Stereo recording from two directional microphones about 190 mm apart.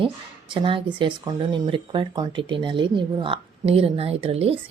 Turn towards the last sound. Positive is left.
turn(degrees=-30)  # may be behind; listen again after turning